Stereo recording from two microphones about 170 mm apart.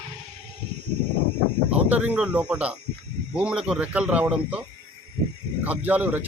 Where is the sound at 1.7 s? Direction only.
10° right (ahead or behind).